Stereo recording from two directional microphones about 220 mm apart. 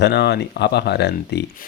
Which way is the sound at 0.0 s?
50° left (ahead or behind).